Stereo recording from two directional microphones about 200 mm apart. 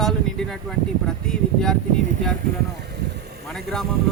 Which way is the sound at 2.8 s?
55° right (ahead or behind).